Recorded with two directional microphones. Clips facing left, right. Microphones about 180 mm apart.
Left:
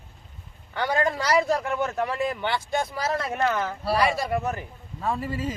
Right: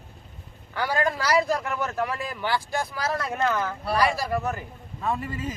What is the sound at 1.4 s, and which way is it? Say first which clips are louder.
Speech: left 2 dB; centre (ahead or behind).